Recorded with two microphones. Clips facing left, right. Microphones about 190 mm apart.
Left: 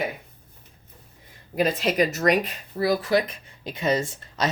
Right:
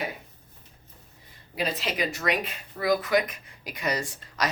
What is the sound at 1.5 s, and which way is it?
Speech, 45° left (ahead or behind).